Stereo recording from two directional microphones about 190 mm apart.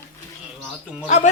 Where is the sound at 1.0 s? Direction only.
40° left (ahead or behind).